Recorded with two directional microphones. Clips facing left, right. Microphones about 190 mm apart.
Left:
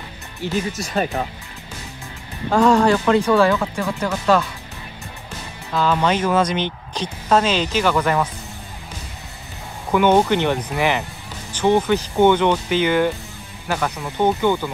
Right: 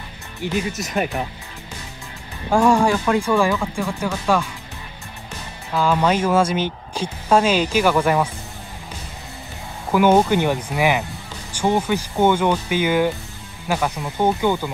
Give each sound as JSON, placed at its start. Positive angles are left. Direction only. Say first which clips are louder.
{"t": 0.4, "sound": "speech", "louder": "even", "side_deg": -15}
{"t": 2.5, "sound": "speech", "louder": "left 1 dB", "side_deg": -10}
{"t": 5.8, "sound": "speech", "louder": "even", "side_deg": -10}
{"t": 9.9, "sound": "speech", "louder": "even", "side_deg": -10}